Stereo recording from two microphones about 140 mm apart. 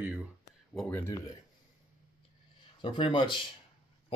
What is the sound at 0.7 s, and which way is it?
Speech, 10° left (ahead or behind).